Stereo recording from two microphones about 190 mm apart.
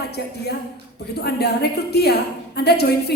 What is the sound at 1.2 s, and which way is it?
A woman's voice, 60° left (ahead or behind).